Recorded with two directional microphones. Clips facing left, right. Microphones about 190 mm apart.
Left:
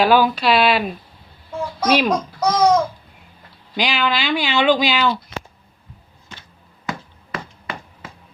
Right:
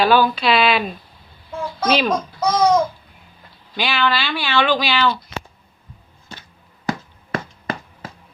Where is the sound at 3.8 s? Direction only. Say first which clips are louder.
Even; 15° left (ahead or behind).